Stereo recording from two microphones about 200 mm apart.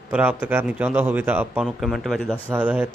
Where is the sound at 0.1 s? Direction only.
10° right (ahead or behind).